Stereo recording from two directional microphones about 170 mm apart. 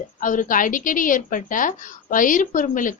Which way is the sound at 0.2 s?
50° left (ahead or behind).